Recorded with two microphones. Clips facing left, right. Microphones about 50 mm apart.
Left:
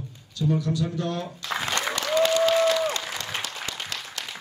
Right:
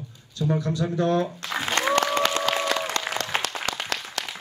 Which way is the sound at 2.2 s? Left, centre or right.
Right.